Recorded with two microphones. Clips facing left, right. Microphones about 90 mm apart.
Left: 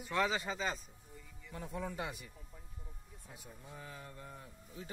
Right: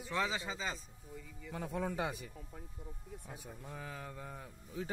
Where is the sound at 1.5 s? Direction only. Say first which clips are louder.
Right 4 dB; 90° right.